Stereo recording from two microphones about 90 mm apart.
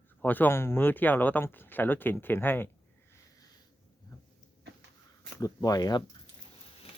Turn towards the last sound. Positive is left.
turn(degrees=45)  # may be behind; listen again after turning